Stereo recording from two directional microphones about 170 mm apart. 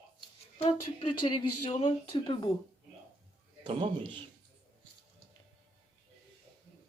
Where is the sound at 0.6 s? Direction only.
35° left (ahead or behind).